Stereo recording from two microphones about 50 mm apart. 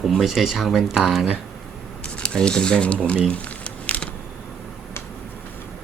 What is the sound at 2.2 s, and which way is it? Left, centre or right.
Speech, centre.